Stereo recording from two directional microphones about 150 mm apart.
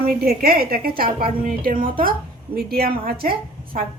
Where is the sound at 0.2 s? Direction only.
80° right.